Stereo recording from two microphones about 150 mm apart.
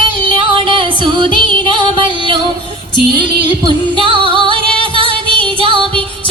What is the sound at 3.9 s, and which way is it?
Music, 35° right (ahead or behind).